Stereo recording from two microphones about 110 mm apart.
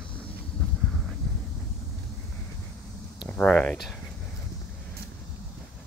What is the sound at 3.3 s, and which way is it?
Speech, 10° left (ahead or behind).